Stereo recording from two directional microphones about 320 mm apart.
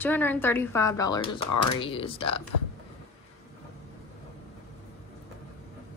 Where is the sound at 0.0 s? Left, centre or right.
Centre.